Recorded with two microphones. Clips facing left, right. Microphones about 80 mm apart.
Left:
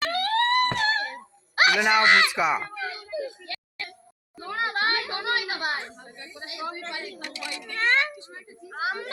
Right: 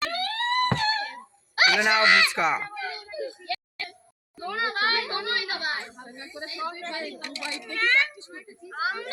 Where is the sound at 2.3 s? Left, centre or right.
Centre.